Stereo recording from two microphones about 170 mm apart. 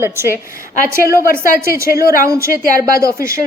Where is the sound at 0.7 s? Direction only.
55° left (ahead or behind).